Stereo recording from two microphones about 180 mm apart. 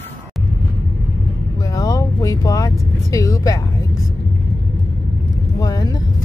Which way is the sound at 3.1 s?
15° left (ahead or behind).